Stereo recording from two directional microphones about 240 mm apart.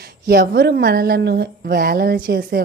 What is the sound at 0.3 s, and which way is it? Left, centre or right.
Speech, right.